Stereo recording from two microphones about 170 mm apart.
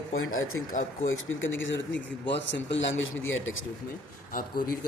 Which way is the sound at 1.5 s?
90° left.